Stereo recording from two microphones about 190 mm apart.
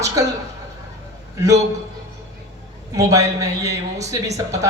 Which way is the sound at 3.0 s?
15° right (ahead or behind).